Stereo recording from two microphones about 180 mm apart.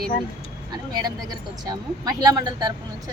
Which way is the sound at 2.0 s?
20° right (ahead or behind).